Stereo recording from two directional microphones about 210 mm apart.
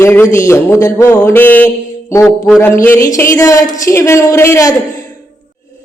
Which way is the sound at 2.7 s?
10° left (ahead or behind).